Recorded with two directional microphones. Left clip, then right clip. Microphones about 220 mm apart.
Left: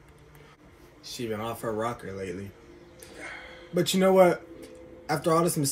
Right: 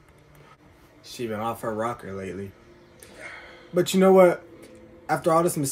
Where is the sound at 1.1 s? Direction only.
20° right (ahead or behind).